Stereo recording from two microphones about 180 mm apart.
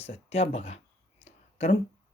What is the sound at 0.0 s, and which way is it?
Speech, 35° left (ahead or behind).